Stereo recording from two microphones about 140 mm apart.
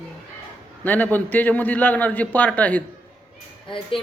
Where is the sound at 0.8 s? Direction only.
10° left (ahead or behind).